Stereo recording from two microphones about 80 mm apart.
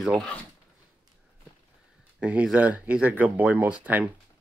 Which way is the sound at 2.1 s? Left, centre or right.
Centre.